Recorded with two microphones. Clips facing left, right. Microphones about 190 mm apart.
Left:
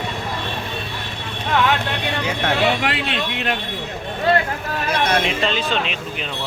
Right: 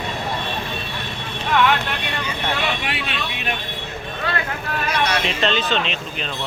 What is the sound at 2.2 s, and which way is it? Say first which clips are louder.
Speech: left 6 dB; 80° left.